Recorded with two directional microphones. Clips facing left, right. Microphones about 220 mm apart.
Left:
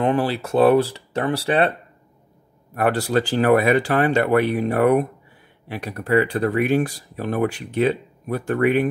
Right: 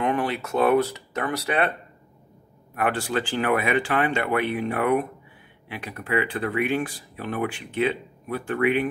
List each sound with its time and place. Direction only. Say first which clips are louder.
0.0 s speech: left 4 dB; 30° left (ahead or behind)
2.7 s speech: left 5 dB; 40° left (ahead or behind)